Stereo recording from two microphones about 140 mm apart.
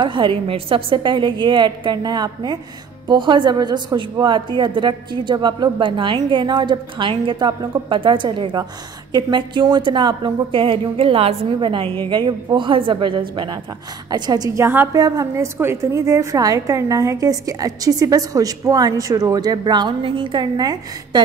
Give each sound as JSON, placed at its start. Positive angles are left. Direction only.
{"t": 0.0, "sound": "a woman's voice", "side_deg": -35}